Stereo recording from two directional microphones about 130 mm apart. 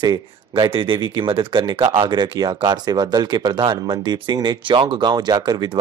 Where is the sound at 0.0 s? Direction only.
35° right (ahead or behind).